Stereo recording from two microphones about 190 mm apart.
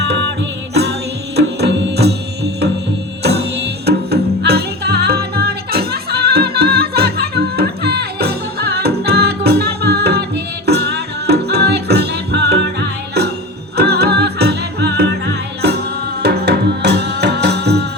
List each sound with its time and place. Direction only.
0.0 s music: 65° right (ahead or behind)
16.2 s music: 60° right (ahead or behind)